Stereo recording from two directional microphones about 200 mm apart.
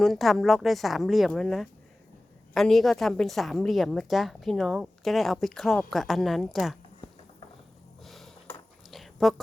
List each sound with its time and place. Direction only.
0.0 s a woman's voice: centre (ahead or behind)
8.0 s a sound: centre (ahead or behind)
8.9 s dog: centre (ahead or behind)